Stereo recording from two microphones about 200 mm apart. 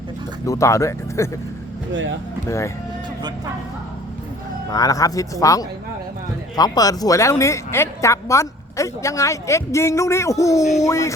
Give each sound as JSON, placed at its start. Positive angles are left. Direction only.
{"t": 0.4, "sound": "speech", "side_deg": 15}
{"t": 1.9, "sound": "speech", "side_deg": -70}
{"t": 2.5, "sound": "speech", "side_deg": 15}
{"t": 4.7, "sound": "speech", "side_deg": 15}